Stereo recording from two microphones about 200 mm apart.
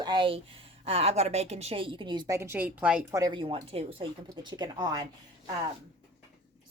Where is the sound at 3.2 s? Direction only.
25° right (ahead or behind).